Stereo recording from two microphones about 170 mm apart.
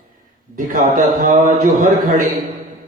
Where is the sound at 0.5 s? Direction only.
55° right (ahead or behind).